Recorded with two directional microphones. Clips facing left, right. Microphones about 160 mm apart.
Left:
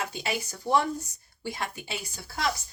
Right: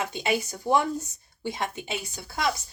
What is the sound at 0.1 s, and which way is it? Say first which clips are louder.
A woman's voice: right 5 dB; 20° right (ahead or behind).